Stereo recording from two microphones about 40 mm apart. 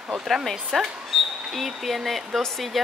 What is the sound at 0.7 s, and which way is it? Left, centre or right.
A woman's voice, centre.